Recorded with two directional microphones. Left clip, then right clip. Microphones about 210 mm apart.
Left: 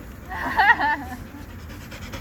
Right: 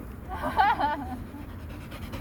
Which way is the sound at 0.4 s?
50° right (ahead or behind).